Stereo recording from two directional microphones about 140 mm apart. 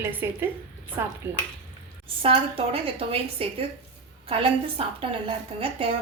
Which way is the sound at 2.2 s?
40° right (ahead or behind).